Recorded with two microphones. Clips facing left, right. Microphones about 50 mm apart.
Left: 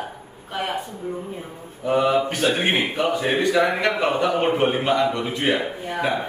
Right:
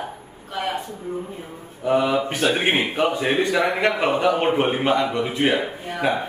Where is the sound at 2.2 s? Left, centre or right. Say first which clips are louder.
Right 1 dB; right.